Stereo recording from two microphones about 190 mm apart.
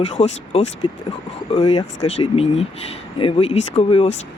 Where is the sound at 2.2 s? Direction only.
35° left (ahead or behind).